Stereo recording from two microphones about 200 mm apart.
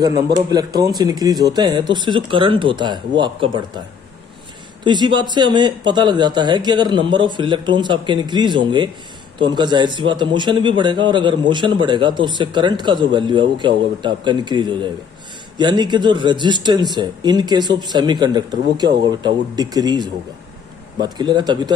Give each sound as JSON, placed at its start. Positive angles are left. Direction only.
{"t": 0.5, "sound": "a man's voice", "side_deg": -20}
{"t": 4.8, "sound": "a man's voice", "side_deg": -25}